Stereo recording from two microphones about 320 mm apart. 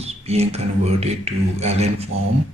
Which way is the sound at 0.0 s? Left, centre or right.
Centre.